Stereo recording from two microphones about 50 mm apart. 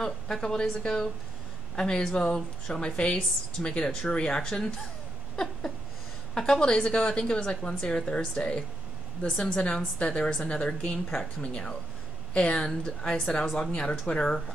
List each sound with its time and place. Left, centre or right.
0.0 s a woman's voice: centre
5.3 s a sound: centre
6.3 s a woman's voice: centre